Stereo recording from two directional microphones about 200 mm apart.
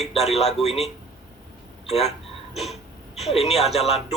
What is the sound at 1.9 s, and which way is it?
Speech, 30° left (ahead or behind).